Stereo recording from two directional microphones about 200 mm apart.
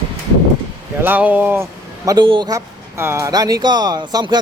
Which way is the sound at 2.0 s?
25° right (ahead or behind).